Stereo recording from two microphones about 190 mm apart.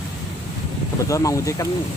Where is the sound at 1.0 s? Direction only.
15° left (ahead or behind).